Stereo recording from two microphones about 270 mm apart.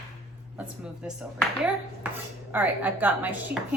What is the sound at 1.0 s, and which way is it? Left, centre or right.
Speech, centre.